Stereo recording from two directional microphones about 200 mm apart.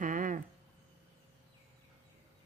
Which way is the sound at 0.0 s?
40° right (ahead or behind).